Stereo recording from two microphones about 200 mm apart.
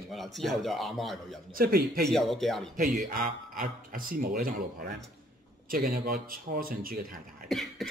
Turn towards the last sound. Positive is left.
turn(degrees=0)  # may be behind; listen again after turning